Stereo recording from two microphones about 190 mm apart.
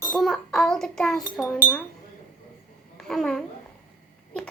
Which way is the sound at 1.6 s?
10° left (ahead or behind).